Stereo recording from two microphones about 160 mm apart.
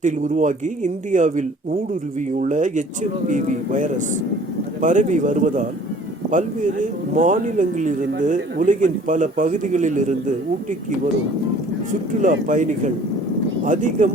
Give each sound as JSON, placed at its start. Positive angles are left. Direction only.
{"t": 0.0, "sound": "a man's voice", "side_deg": -50}
{"t": 11.9, "sound": "a man's voice", "side_deg": -55}